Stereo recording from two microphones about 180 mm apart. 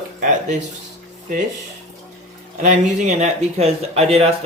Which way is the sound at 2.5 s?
40° right (ahead or behind).